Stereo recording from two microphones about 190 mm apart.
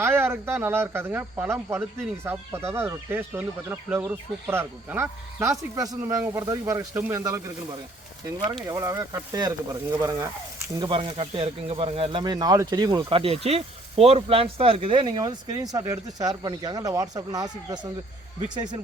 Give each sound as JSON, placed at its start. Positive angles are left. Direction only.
{"t": 0.0, "sound": "speech", "side_deg": -15}
{"t": 10.8, "sound": "speech", "side_deg": -25}